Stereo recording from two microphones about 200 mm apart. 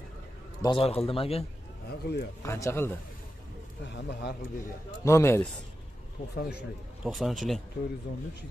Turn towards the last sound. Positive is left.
turn(degrees=0)  # may be behind; listen again after turning